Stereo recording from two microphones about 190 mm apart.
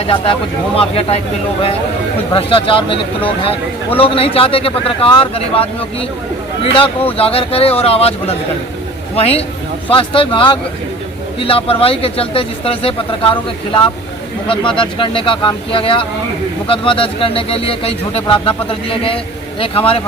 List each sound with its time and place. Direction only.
0.0 s speech: 30° left (ahead or behind)
2.3 s speech: 30° left (ahead or behind)